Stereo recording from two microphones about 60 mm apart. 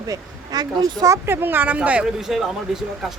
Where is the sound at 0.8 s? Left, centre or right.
Right.